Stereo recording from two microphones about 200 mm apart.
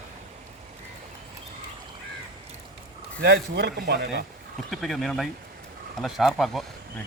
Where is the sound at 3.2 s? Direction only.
55° right (ahead or behind).